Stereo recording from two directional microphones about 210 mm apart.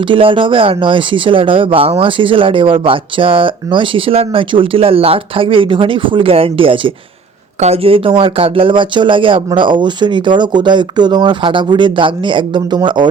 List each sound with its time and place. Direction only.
0.0 s speech: 25° right (ahead or behind)